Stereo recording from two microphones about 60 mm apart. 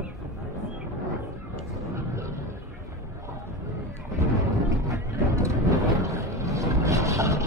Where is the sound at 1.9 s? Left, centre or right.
Right.